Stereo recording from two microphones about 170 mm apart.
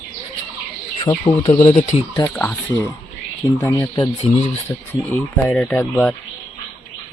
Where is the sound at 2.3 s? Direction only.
5° left (ahead or behind).